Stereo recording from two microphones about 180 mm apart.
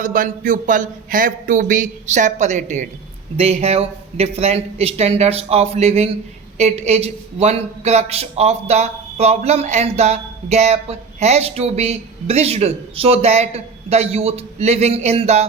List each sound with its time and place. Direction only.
0.0 s a man's voice: 45° right (ahead or behind)